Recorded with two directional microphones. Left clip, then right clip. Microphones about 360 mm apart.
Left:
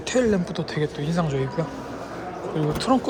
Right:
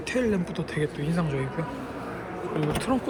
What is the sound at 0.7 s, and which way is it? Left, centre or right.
Speech, left.